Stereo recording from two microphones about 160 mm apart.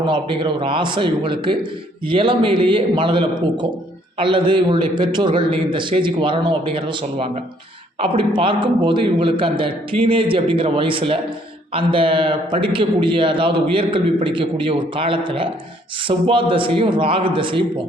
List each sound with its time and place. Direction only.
0.0 s a man's voice: 30° right (ahead or behind)